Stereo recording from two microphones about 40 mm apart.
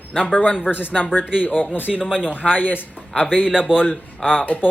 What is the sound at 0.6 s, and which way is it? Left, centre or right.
Speech, left.